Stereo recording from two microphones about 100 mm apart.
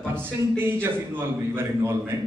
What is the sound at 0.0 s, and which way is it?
A man's voice, 20° right (ahead or behind).